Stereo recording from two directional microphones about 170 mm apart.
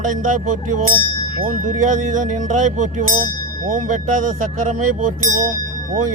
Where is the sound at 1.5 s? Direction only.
50° right (ahead or behind).